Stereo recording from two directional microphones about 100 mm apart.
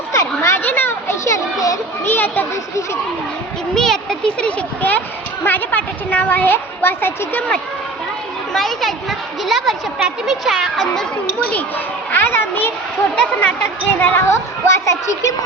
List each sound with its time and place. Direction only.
0.1 s a sound: 30° left (ahead or behind)
0.6 s children playing: 20° left (ahead or behind)
2.0 s a child's voice: 20° left (ahead or behind)
3.8 s a child's voice: 5° left (ahead or behind)
8.5 s speech: centre (ahead or behind)
12.1 s children playing: 20° left (ahead or behind)
14.0 s a woman's voice: 20° left (ahead or behind)